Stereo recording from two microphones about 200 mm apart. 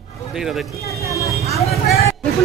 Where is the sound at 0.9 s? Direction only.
15° right (ahead or behind).